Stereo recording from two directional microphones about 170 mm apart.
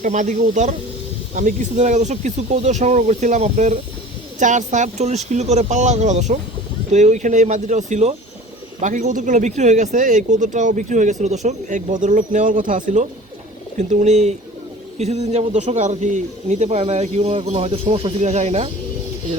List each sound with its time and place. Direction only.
0.0 s speech: 45° right (ahead or behind)